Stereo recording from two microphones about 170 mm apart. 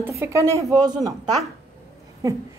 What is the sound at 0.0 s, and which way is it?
A woman's voice, 15° right (ahead or behind).